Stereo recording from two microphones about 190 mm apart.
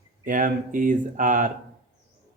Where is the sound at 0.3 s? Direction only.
45° right (ahead or behind).